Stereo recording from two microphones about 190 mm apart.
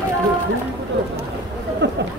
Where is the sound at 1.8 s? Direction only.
65° right (ahead or behind).